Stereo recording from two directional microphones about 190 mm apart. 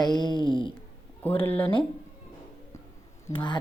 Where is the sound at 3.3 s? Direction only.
25° left (ahead or behind).